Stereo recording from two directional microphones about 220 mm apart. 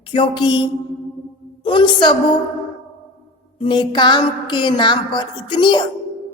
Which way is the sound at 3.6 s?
20° left (ahead or behind).